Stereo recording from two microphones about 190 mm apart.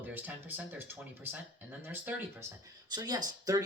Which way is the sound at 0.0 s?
10° right (ahead or behind).